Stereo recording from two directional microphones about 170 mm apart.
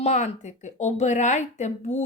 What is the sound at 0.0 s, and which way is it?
Speech, 40° left (ahead or behind).